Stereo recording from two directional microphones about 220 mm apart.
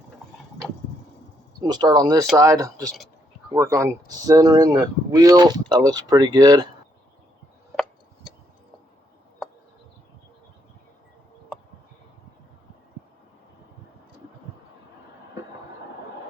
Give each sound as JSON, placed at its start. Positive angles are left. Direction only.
{"t": 1.6, "sound": "speech", "side_deg": -20}